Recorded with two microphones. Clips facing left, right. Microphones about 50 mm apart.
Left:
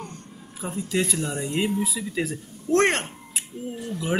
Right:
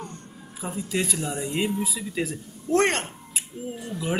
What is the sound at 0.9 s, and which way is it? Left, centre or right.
Speech, centre.